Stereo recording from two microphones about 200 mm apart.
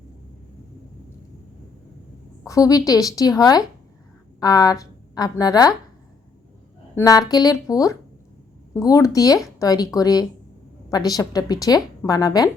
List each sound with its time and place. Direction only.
2.4 s a woman's voice: 15° left (ahead or behind)
6.9 s a woman's voice: 15° left (ahead or behind)